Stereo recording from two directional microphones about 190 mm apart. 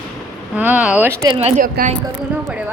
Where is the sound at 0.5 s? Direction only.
10° right (ahead or behind).